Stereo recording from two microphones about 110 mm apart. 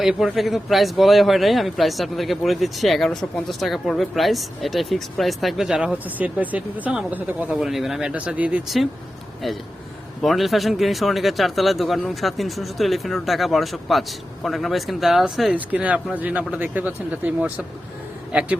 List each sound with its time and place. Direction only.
0.0 s speech: centre (ahead or behind)
7.5 s speech: 5° right (ahead or behind)
10.2 s speech: centre (ahead or behind)
15.5 s speech: 15° right (ahead or behind)